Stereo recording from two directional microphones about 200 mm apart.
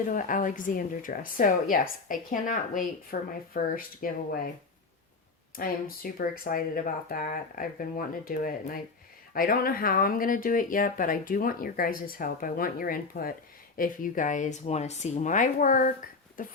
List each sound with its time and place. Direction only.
0.1 s speech: 40° left (ahead or behind)
5.5 s speech: 45° left (ahead or behind)